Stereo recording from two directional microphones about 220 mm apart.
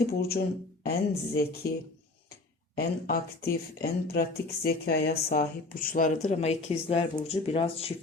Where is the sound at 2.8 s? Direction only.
45° left (ahead or behind).